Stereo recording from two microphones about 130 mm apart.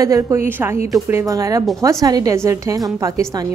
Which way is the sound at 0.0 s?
20° right (ahead or behind).